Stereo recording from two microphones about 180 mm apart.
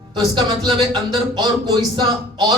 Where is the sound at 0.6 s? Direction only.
25° right (ahead or behind).